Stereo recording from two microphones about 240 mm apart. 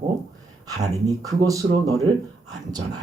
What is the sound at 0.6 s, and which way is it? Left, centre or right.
Speech, centre.